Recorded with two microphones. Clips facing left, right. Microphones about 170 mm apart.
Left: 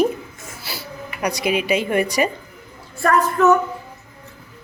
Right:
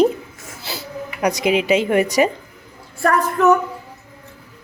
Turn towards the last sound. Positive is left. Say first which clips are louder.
# even
turn(degrees=-10)  # may be behind; listen again after turning